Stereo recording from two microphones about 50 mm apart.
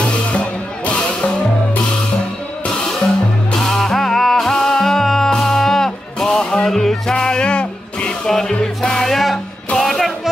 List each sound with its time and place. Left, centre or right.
0.0 s music: left
3.5 s music: centre